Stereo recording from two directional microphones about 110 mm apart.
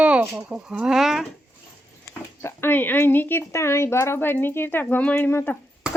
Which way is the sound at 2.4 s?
20° left (ahead or behind).